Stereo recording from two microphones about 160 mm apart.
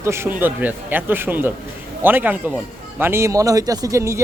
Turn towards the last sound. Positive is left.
turn(degrees=-20)  # may be behind; listen again after turning